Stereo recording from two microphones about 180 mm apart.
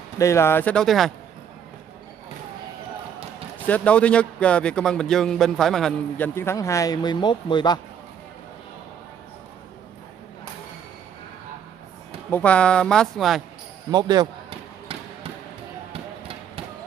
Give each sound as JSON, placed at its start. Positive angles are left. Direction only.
{"t": 0.2, "sound": "speech", "side_deg": 15}
{"t": 3.6, "sound": "speech", "side_deg": 10}
{"t": 12.3, "sound": "speech", "side_deg": 10}
{"t": 13.8, "sound": "speech", "side_deg": -20}
{"t": 15.9, "sound": "music", "side_deg": -30}